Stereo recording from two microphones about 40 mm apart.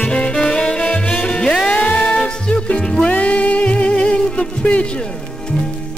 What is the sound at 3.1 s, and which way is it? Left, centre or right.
Music, left.